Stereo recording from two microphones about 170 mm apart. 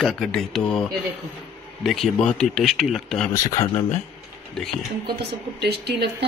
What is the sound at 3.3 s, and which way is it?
Speech, 20° left (ahead or behind).